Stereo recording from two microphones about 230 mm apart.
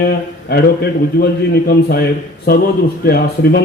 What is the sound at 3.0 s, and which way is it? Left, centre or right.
Speech, left.